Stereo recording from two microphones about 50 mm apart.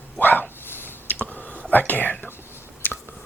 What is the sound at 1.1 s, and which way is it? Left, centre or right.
Whispering, left.